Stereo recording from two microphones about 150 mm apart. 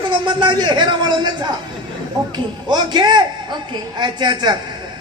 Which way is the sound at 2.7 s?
30° right (ahead or behind).